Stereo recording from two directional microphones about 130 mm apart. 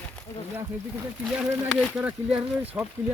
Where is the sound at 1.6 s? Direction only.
Centre (ahead or behind).